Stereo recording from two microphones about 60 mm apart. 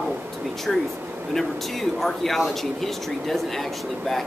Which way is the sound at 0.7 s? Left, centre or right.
Centre.